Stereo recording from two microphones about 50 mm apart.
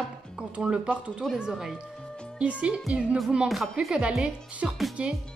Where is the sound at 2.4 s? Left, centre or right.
Right.